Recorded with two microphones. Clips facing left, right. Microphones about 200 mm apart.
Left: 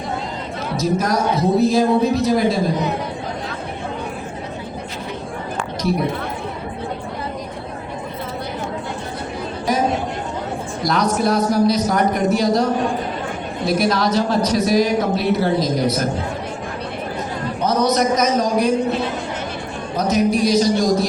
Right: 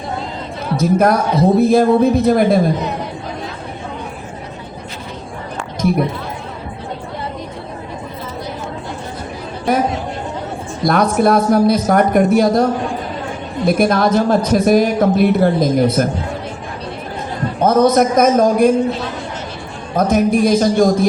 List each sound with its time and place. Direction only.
0.8 s a man's voice: 55° right (ahead or behind)
9.7 s a man's voice: 55° right (ahead or behind)
10.8 s a man's voice: 55° right (ahead or behind)
13.7 s a man's voice: 55° right (ahead or behind)
17.6 s a man's voice: 50° right (ahead or behind)
20.0 s a man's voice: 50° right (ahead or behind)